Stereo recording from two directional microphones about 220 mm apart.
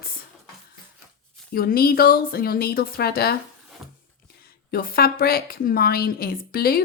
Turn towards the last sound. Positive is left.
turn(degrees=45)  # may be behind; listen again after turning